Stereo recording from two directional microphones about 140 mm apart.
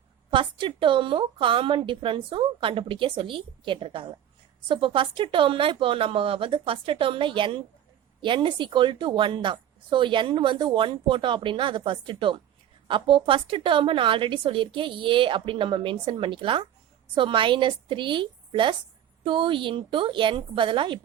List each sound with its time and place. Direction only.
0.3 s a woman's voice: 35° right (ahead or behind)